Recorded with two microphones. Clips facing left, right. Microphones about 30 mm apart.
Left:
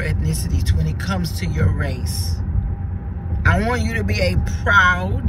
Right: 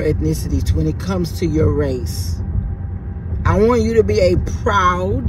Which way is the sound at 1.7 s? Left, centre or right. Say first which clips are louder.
Right 8 dB; left.